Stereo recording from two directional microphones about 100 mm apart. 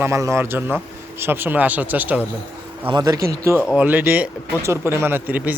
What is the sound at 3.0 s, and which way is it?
Speech, 30° right (ahead or behind).